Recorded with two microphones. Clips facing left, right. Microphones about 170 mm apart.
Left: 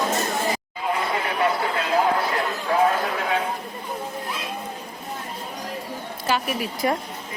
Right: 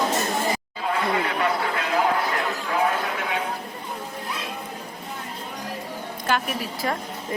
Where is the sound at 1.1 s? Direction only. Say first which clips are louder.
Even; 25° left (ahead or behind).